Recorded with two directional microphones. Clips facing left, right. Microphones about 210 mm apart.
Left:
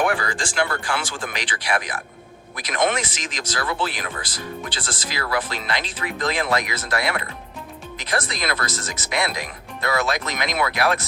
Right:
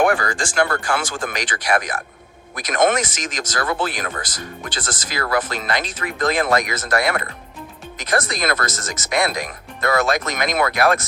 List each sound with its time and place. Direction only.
0.0 s speech: 45° right (ahead or behind)